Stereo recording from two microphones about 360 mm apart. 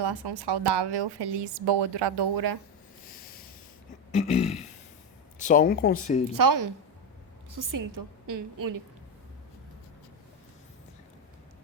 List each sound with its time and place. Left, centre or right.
0.0 s a woman's voice: right
4.1 s a sound: centre
5.4 s speech: left
6.3 s a woman's voice: right